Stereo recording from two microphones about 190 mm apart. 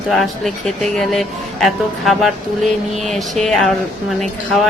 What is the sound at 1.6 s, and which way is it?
Speech, centre (ahead or behind).